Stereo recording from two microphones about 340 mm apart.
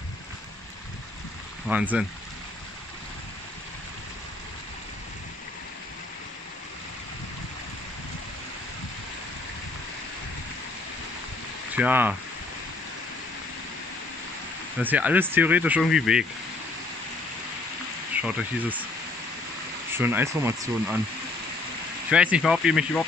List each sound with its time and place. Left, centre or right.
1.7 s speech: centre
11.7 s speech: centre
14.8 s speech: centre
18.1 s speech: centre
19.9 s speech: centre
22.1 s speech: centre